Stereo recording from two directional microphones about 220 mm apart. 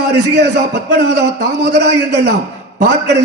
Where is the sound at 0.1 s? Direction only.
50° right (ahead or behind).